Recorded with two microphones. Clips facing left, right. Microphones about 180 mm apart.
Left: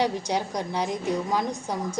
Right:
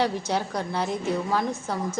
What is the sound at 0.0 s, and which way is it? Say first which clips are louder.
A woman's voice: even; 15° left (ahead or behind).